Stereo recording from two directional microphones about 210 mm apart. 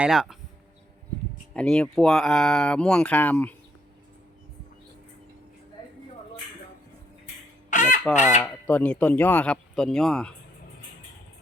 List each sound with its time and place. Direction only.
0.0 s speech: 5° right (ahead or behind)
1.5 s speech: 5° left (ahead or behind)
7.7 s goose: 35° left (ahead or behind)
8.1 s fowl: 35° left (ahead or behind)
8.4 s speech: 10° left (ahead or behind)